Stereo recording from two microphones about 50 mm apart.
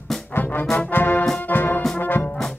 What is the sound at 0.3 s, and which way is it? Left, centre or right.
Trombone, left.